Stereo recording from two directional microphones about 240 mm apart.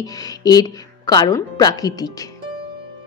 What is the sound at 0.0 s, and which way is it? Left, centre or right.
Speech, centre.